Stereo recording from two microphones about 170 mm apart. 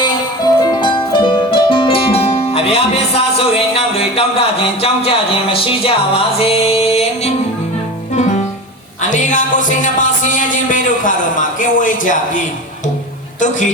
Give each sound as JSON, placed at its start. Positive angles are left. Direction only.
{"t": 0.0, "sound": "music", "side_deg": 25}